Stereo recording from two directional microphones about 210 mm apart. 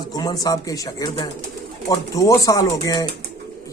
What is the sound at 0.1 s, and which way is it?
Speech, 20° left (ahead or behind).